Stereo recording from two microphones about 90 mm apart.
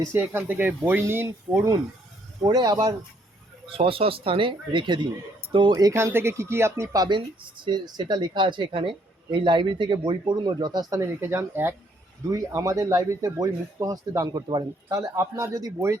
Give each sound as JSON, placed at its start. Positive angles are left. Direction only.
{"t": 0.0, "sound": "speech", "side_deg": -25}
{"t": 2.4, "sound": "speech", "side_deg": -50}
{"t": 3.7, "sound": "speech", "side_deg": -90}
{"t": 5.9, "sound": "speech", "side_deg": -30}
{"t": 7.0, "sound": "speech", "side_deg": -60}
{"t": 11.2, "sound": "speech", "side_deg": -25}
{"t": 12.3, "sound": "speech", "side_deg": -40}